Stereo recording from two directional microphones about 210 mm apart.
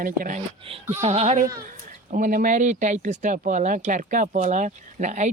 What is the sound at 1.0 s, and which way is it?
Speech, 30° right (ahead or behind).